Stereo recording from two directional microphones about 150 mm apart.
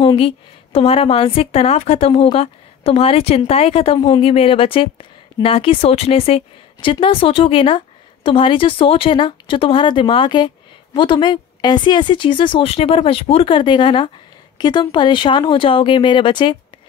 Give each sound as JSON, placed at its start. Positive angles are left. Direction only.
{"t": 0.0, "sound": "a woman's voice", "side_deg": 40}